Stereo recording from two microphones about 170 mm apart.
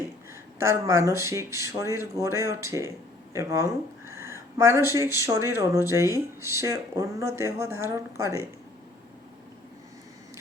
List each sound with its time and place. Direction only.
0.6 s speech: 15° right (ahead or behind)